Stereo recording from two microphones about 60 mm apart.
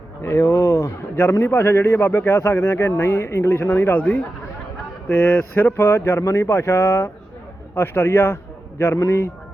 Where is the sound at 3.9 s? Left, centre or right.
Left.